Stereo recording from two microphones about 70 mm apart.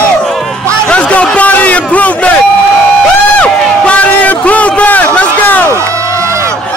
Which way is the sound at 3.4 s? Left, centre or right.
Centre.